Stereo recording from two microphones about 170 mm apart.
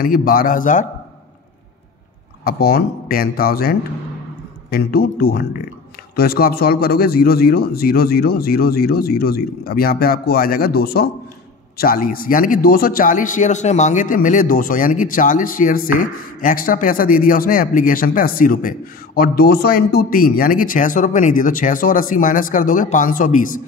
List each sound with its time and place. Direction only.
0.0 s speech: 60° left (ahead or behind)
2.4 s a man's voice: 60° left (ahead or behind)